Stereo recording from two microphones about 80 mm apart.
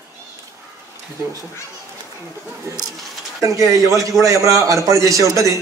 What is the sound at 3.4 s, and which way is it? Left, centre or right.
A man's voice, right.